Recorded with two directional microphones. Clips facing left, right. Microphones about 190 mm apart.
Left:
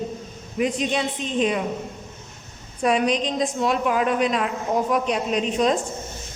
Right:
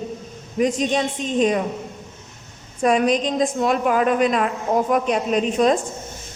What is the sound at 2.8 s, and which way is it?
A man's voice, 45° right (ahead or behind).